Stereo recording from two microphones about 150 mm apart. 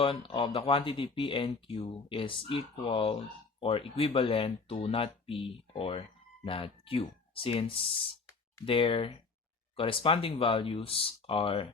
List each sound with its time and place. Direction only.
0.0 s speech: 35° left (ahead or behind)